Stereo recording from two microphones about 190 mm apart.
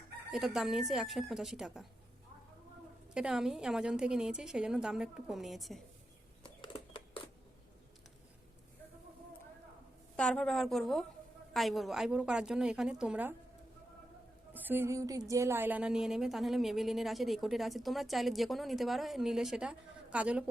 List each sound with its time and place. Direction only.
0.3 s a woman's voice: centre (ahead or behind)
3.2 s a woman's voice: 5° right (ahead or behind)
6.4 s a sound: 25° left (ahead or behind)
10.2 s a woman's voice: 5° left (ahead or behind)
14.5 s a woman's voice: 10° right (ahead or behind)